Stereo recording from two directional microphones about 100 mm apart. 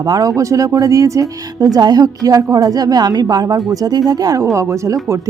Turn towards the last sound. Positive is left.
turn(degrees=-30)  # may be behind; listen again after turning